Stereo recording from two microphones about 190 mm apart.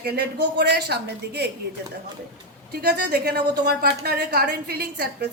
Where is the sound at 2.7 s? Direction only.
55° right (ahead or behind).